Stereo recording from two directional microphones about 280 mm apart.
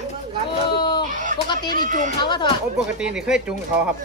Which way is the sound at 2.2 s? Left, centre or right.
Centre.